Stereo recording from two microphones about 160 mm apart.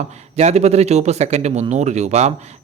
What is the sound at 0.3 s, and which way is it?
Speech, 45° right (ahead or behind).